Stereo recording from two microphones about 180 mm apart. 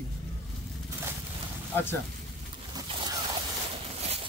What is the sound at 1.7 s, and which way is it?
Speech, 10° left (ahead or behind).